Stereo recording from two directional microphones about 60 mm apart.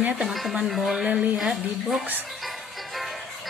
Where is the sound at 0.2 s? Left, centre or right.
Centre.